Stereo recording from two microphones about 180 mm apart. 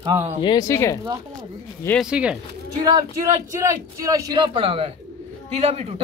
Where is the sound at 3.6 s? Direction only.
15° right (ahead or behind); by 5.9 s 35° right (ahead or behind).